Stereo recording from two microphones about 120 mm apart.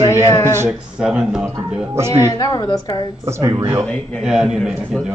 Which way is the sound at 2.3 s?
30° left (ahead or behind).